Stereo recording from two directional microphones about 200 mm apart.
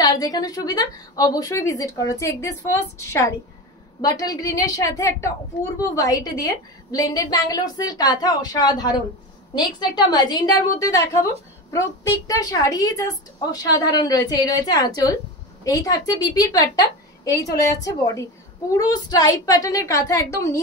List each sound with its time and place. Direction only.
0.0 s a woman's voice: 20° left (ahead or behind)